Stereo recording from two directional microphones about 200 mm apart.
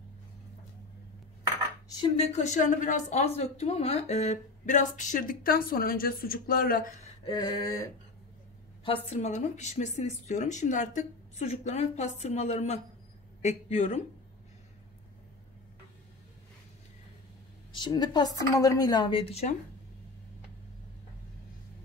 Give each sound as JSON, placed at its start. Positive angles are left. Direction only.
{"t": 2.1, "sound": "a woman's voice", "side_deg": 35}
{"t": 7.2, "sound": "a sound", "side_deg": 20}
{"t": 8.8, "sound": "a woman's voice", "side_deg": 30}
{"t": 17.7, "sound": "speech", "side_deg": 20}